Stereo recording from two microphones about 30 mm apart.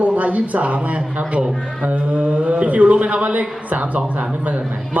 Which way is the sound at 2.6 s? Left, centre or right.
Right.